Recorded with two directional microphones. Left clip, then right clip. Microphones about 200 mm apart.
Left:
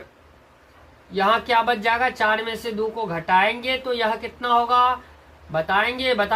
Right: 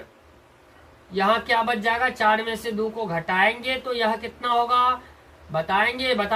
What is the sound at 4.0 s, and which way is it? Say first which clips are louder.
Speech: left 1 dB; 15° left (ahead or behind).